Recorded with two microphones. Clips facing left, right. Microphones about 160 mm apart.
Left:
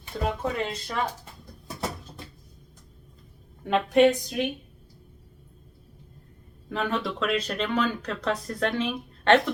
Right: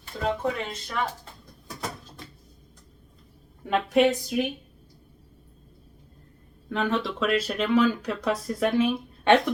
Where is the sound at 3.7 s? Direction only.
Centre (ahead or behind).